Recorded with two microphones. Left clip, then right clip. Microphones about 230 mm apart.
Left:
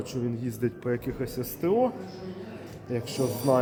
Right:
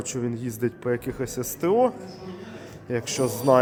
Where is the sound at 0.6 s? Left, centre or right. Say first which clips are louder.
Right 4 dB; right.